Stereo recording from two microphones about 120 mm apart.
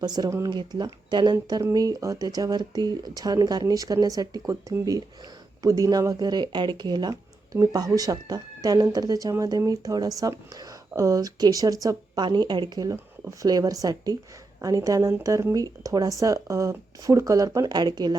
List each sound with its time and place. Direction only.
0.0 s speech: 35° right (ahead or behind)
0.3 s speech: 25° right (ahead or behind)
0.5 s speech: 35° right (ahead or behind)